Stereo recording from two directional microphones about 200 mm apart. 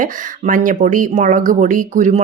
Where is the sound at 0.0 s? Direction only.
40° right (ahead or behind).